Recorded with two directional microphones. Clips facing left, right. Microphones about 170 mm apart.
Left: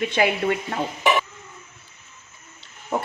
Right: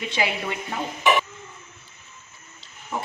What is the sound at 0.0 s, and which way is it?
Speech, 55° left (ahead or behind).